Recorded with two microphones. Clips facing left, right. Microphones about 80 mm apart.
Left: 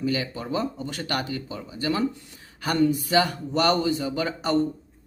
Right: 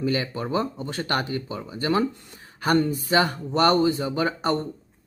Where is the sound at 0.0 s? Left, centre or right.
Right.